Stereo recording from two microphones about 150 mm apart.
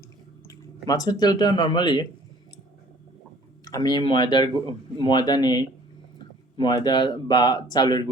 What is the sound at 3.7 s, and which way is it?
Speech, 25° left (ahead or behind).